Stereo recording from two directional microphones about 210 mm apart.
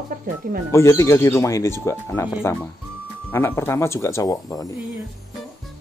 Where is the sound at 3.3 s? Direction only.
10° left (ahead or behind).